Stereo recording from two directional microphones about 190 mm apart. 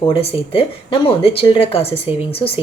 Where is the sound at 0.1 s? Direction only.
30° left (ahead or behind).